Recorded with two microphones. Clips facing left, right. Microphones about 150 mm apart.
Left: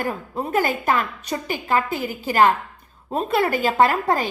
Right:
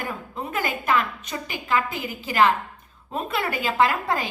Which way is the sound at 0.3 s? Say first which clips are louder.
Left 6 dB; 40° left (ahead or behind).